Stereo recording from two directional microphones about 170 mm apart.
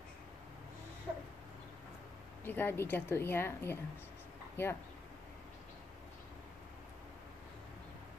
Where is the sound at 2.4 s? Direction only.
10° left (ahead or behind).